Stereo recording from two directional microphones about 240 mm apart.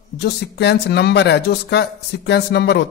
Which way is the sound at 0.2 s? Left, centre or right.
Left.